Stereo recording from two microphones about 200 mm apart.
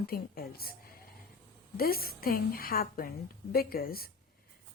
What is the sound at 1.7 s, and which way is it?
Speech, 50° left (ahead or behind).